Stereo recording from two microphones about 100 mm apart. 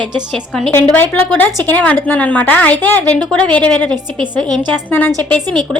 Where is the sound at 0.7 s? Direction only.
20° left (ahead or behind); by 4.6 s 5° left (ahead or behind).